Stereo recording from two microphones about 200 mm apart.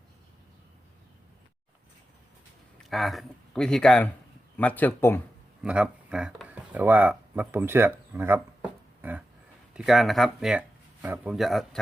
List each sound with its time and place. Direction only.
2.9 s speech: centre (ahead or behind)
5.6 s speech: 5° right (ahead or behind)
9.0 s a sound: 10° right (ahead or behind)
9.7 s speech: centre (ahead or behind)